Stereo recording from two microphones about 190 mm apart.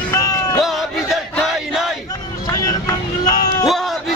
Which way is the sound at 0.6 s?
Centre (ahead or behind).